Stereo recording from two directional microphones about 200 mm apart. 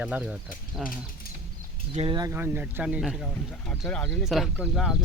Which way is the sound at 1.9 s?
25° right (ahead or behind).